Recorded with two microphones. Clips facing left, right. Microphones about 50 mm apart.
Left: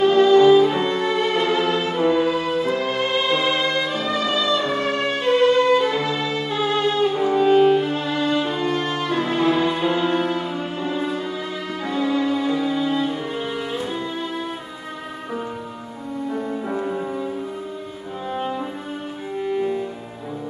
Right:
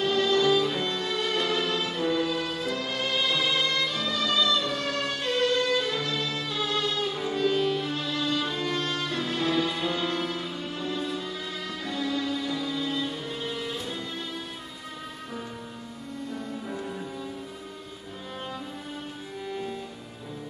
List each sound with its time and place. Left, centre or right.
0.0 s music: left
16.3 s music: left
18.3 s music: left